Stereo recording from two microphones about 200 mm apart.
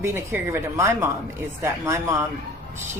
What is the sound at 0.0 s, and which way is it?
Speech, 10° right (ahead or behind).